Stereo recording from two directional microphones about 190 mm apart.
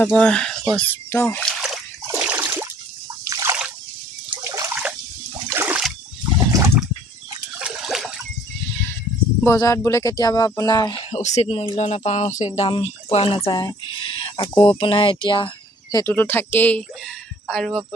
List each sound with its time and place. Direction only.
0.0 s speech: 5° left (ahead or behind)
2.0 s a sound: 10° right (ahead or behind)
3.3 s splash: 15° right (ahead or behind)
4.4 s water: 15° right (ahead or behind)
5.5 s splash: 10° right (ahead or behind)
6.2 s water: 15° right (ahead or behind)
7.5 s water: 5° right (ahead or behind)
9.4 s speech: 15° left (ahead or behind)